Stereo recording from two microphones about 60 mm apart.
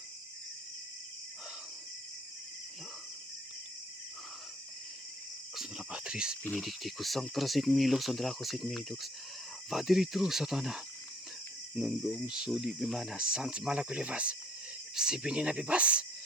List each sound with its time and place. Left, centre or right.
5.5 s cricket: centre
6.5 s speech: centre
11.8 s speech: centre